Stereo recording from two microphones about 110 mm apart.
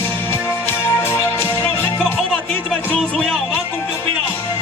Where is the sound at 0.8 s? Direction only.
20° left (ahead or behind).